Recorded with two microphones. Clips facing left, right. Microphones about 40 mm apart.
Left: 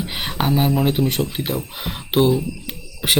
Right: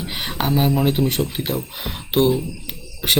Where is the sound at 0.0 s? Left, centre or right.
Centre.